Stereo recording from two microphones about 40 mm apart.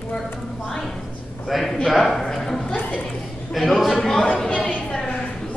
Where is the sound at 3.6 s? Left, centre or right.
Centre.